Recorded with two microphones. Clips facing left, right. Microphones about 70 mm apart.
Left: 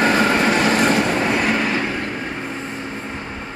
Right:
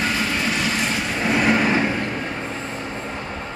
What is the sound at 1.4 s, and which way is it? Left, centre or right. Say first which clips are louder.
Train: right 2 dB; centre.